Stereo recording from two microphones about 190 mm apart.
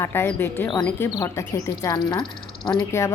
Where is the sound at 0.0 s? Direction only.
10° left (ahead or behind).